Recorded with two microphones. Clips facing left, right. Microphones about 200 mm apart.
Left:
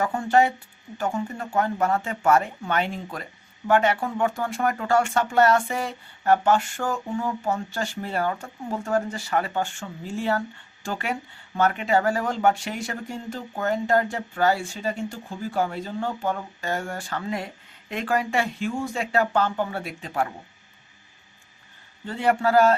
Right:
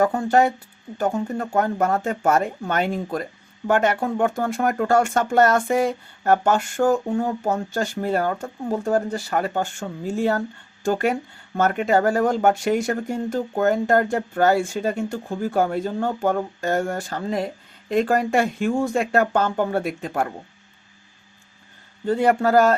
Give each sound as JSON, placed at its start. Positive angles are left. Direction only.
{"t": 0.0, "sound": "speech", "side_deg": -40}
{"t": 22.0, "sound": "speech", "side_deg": -45}